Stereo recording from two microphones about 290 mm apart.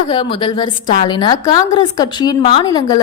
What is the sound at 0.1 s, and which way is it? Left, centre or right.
A woman's voice, centre.